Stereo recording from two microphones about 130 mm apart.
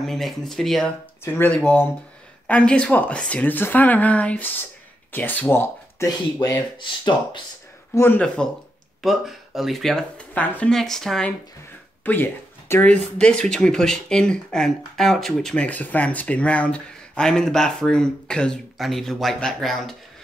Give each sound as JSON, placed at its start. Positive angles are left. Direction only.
{"t": 0.0, "sound": "speech", "side_deg": 0}
{"t": 1.2, "sound": "speech", "side_deg": 15}
{"t": 6.0, "sound": "speech", "side_deg": 30}
{"t": 7.9, "sound": "speech", "side_deg": 15}
{"t": 9.0, "sound": "speech", "side_deg": 0}
{"t": 12.0, "sound": "speech", "side_deg": 15}